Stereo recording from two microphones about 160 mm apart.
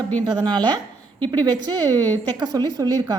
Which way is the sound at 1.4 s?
25° right (ahead or behind).